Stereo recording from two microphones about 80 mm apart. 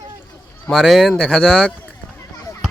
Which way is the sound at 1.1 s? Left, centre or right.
Centre.